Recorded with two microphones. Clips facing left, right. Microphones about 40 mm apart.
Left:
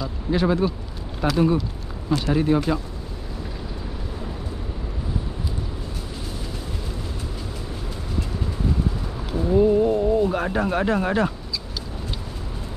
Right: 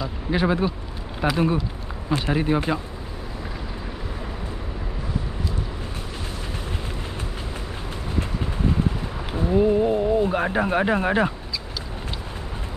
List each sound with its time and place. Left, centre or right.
0.0 s speech: centre
9.6 s speech: centre